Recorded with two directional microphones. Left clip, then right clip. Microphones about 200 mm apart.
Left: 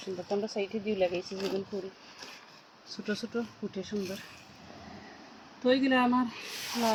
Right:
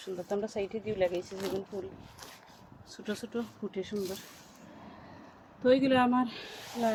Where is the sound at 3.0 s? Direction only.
25° left (ahead or behind).